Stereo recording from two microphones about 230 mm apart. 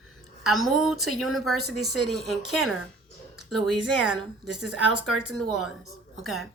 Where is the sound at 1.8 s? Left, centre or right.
Right.